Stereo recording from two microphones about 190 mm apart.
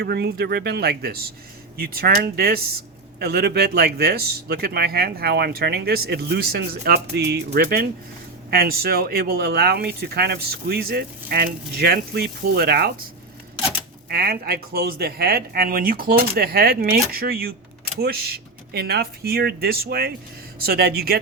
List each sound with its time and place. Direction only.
0.0 s speech: 60° right (ahead or behind)
14.1 s speech: 55° right (ahead or behind)